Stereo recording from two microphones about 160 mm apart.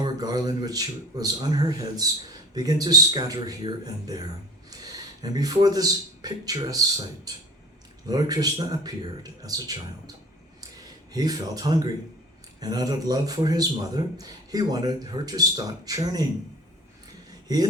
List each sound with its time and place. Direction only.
0.0 s a man's voice: 25° right (ahead or behind)
11.1 s a man's voice: 25° right (ahead or behind)